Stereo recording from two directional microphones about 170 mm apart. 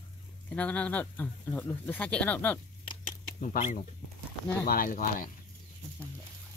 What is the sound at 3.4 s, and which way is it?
Speech, 50° left (ahead or behind).